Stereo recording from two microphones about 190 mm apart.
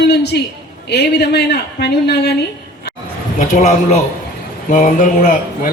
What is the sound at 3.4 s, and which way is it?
A man's voice, 35° left (ahead or behind).